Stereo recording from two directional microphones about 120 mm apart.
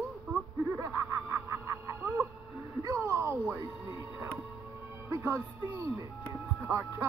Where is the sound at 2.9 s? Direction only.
25° right (ahead or behind).